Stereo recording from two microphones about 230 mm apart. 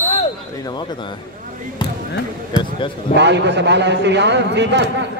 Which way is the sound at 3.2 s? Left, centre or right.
Right.